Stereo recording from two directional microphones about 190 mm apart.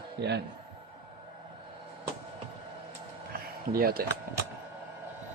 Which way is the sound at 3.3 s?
50° right (ahead or behind).